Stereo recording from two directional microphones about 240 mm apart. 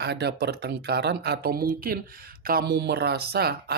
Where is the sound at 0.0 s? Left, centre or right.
Right.